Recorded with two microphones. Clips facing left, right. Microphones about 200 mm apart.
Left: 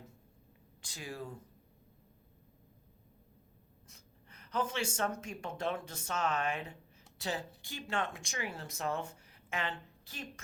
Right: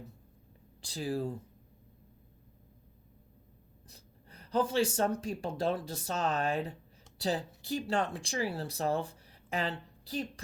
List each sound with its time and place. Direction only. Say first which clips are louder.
0.8 s speech: right 10 dB; 35° right (ahead or behind)
3.8 s speech: right 4 dB; 35° right (ahead or behind)